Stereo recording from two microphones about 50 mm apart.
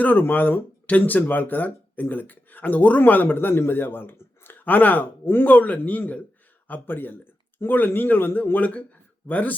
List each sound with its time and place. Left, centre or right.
0.0 s speech: left
5.5 s speech: left